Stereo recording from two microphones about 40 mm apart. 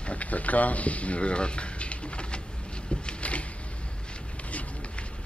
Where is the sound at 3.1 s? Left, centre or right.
Left.